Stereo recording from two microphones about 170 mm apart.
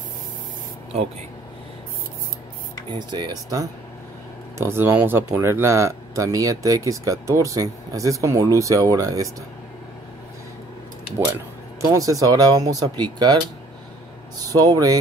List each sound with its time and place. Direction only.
2.9 s speech: 25° right (ahead or behind)
11.8 s speech: 20° right (ahead or behind)
14.4 s speech: 20° right (ahead or behind)